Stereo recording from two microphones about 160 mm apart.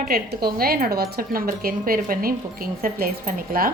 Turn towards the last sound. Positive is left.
turn(degrees=-65)  # may be behind; listen again after turning